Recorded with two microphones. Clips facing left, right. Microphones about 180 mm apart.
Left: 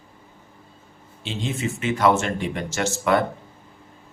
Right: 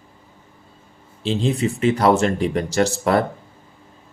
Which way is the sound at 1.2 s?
35° right (ahead or behind).